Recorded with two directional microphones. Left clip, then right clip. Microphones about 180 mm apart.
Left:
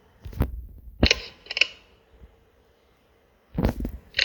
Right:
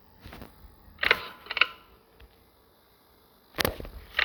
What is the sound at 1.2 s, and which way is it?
Computer keyboard, 60° left (ahead or behind).